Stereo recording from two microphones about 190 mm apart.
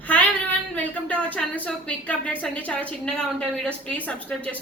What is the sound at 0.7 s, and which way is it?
Speech, 10° left (ahead or behind).